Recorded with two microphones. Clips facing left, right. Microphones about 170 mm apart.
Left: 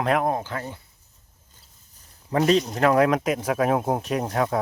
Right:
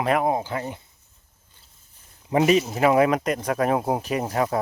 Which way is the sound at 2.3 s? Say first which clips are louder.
Right 1 dB; 5° right (ahead or behind).